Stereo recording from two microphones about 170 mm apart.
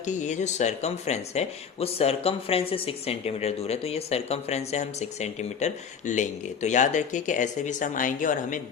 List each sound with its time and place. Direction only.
0.0 s speech: 45° left (ahead or behind)